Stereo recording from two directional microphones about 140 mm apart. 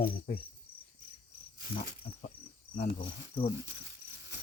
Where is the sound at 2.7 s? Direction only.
85° left.